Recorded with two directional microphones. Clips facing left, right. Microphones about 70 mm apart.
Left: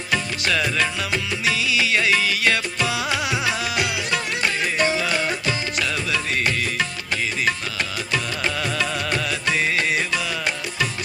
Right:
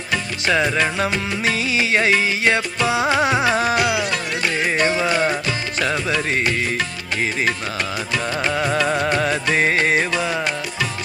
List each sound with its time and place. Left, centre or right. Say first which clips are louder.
0.4 s music: right 6 dB; right
8.3 s music: right 5 dB; right